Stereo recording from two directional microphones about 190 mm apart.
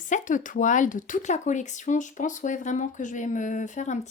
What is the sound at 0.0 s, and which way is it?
Speech, 45° left (ahead or behind).